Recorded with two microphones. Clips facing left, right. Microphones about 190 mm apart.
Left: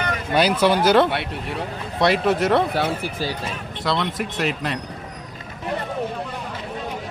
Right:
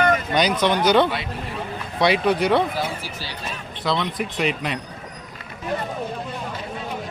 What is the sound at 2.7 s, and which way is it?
Speech, 60° left (ahead or behind).